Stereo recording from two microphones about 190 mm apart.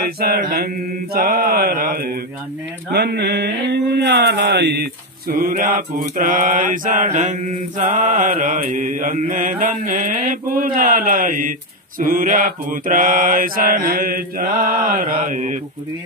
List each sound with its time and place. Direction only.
0.0 s mantra: 50° right (ahead or behind)
5.3 s mantra: 50° right (ahead or behind)
15.2 s speech: 40° right (ahead or behind)